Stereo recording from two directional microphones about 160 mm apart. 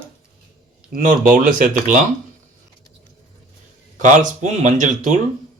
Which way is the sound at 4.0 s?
50° right (ahead or behind).